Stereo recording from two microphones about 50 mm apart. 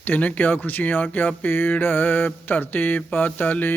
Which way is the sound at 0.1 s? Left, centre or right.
Left.